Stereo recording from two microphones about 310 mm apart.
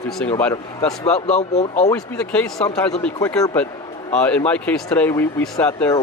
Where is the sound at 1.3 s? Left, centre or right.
Left.